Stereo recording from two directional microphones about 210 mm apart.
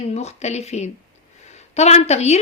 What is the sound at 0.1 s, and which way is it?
A woman's voice, 30° left (ahead or behind).